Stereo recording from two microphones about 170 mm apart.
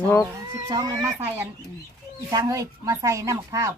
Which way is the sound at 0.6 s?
20° right (ahead or behind).